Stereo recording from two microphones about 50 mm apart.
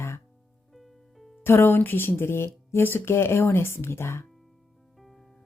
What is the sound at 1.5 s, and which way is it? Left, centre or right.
A woman's voice, left.